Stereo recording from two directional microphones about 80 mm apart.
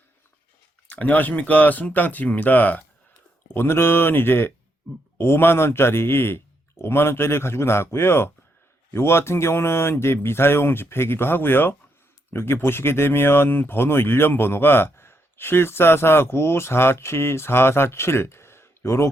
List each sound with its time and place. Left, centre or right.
0.9 s speech: centre; by 19.1 s left